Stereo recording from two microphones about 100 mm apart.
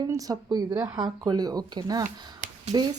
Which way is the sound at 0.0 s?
40° right (ahead or behind).